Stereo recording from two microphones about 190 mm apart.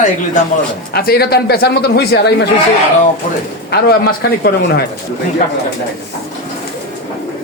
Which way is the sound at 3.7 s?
55° left (ahead or behind).